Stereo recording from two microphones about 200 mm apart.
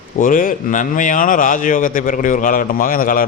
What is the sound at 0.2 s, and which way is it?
A man's voice, 40° left (ahead or behind).